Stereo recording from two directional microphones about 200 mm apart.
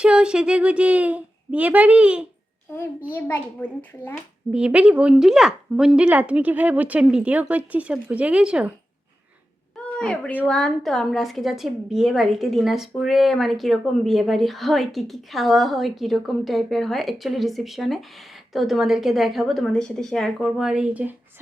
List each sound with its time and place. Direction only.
0.0 s speech: 5° right (ahead or behind)
3.2 s a child's voice: 10° left (ahead or behind)
4.5 s a woman's voice: 5° right (ahead or behind)
9.7 s a sound: 5° left (ahead or behind)
10.4 s a woman's voice: 5° left (ahead or behind)